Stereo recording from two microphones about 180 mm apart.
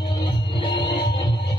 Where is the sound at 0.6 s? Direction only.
25° left (ahead or behind).